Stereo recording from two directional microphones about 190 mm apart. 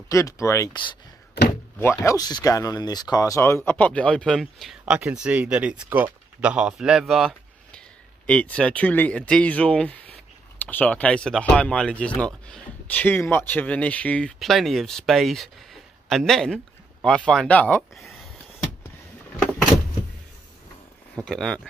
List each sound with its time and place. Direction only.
0.1 s speech: 15° left (ahead or behind); by 18.3 s centre (ahead or behind)
21.2 s speech: 5° left (ahead or behind)